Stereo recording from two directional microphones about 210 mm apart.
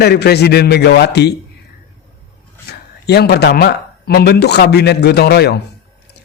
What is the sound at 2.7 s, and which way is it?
A man's voice, 50° left (ahead or behind).